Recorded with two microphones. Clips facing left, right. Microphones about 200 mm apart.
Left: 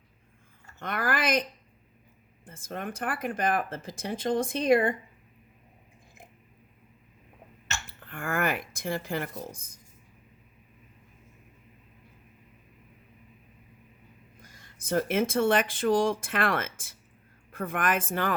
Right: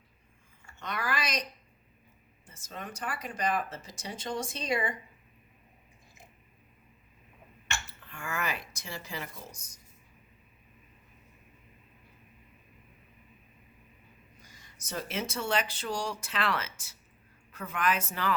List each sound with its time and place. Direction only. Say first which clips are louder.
0.8 s speech: left 5 dB; 55° left (ahead or behind)
7.9 s speech: left 6 dB; 55° left (ahead or behind)
14.4 s speech: left 9 dB; 55° left (ahead or behind)